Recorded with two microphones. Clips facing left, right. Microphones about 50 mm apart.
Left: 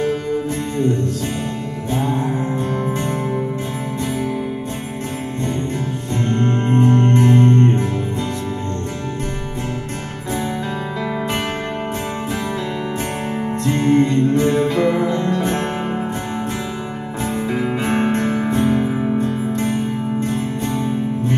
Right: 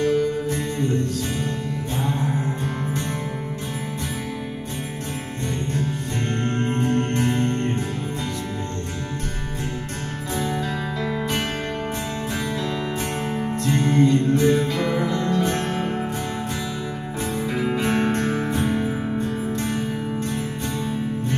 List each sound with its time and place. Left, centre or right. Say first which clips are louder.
1.9 s music: left 7 dB; left
6.4 s music: left 8 dB; left
13.7 s music: left 3 dB; left
17.7 s music: left 3 dB; left
18.8 s music: left 5 dB; centre
19.5 s music: left 5 dB; left